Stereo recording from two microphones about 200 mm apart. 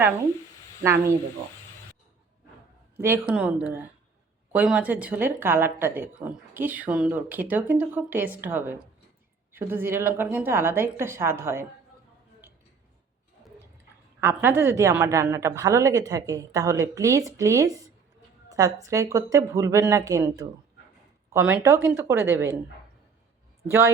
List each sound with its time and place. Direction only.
3.0 s speech: 10° right (ahead or behind)
14.2 s speech: 10° right (ahead or behind)
23.6 s speech: 15° right (ahead or behind)